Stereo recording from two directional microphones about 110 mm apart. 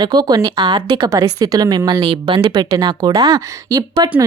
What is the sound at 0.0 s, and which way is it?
Speech, 40° right (ahead or behind).